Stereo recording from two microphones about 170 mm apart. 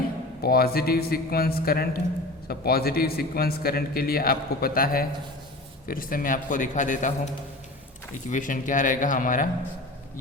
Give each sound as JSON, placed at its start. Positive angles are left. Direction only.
{"t": 0.4, "sound": "a man's voice", "side_deg": 65}
{"t": 8.3, "sound": "a man's voice", "side_deg": 50}